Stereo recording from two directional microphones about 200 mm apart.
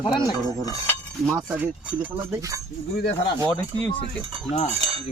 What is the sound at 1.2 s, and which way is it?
Speech, 15° right (ahead or behind).